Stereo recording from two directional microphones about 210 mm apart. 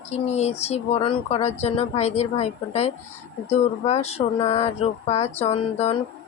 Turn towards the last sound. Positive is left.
turn(degrees=30)  # may be behind; listen again after turning